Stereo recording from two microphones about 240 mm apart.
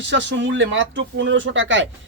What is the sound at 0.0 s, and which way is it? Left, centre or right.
Speech, right.